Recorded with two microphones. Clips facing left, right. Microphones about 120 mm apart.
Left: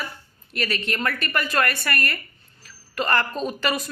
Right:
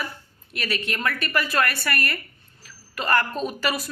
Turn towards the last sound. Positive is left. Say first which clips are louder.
# left 1 dB
turn(degrees=-5)  # may be behind; listen again after turning